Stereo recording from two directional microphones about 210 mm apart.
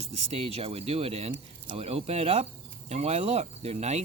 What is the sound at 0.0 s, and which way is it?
Speech, 30° right (ahead or behind).